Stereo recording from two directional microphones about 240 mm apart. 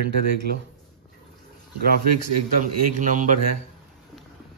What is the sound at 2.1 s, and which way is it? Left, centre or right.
A man's voice, right.